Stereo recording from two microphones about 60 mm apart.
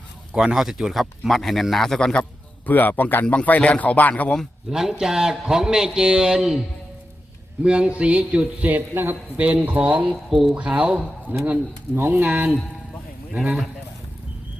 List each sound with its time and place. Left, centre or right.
0.3 s speech: centre
2.6 s speech: left
4.7 s a man's voice: centre
7.6 s a man's voice: centre
8.6 s speech: right
10.2 s speech: centre
10.5 s speech: centre